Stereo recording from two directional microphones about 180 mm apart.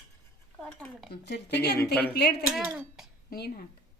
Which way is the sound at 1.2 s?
70° left (ahead or behind).